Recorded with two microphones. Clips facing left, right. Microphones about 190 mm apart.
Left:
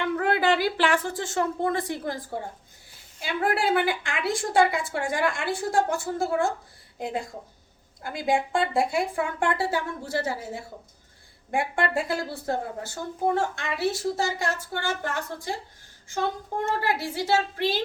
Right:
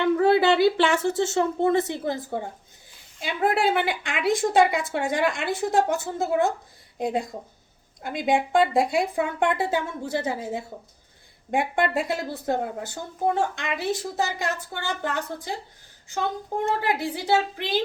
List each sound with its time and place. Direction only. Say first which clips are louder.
0.0 s speech: right 5 dB; 25° right (ahead or behind)
16.8 s speech: right 1 dB; 20° right (ahead or behind)